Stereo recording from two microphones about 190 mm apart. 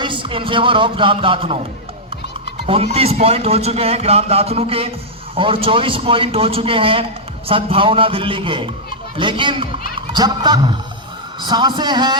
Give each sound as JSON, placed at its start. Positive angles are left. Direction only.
{"t": 0.0, "sound": "speech", "side_deg": -25}
{"t": 2.6, "sound": "a man's voice", "side_deg": -30}